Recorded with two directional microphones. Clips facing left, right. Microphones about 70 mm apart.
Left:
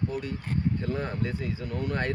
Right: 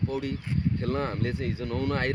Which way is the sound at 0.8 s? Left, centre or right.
Right.